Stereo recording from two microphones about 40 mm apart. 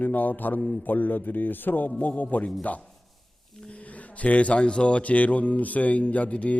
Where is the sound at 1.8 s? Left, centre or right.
Left.